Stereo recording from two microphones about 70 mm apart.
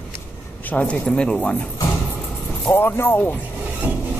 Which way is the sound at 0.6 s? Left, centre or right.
Left.